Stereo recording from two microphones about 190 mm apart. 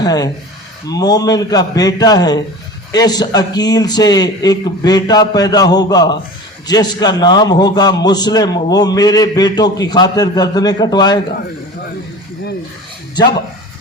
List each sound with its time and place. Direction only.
0.0 s a man's voice: 20° left (ahead or behind)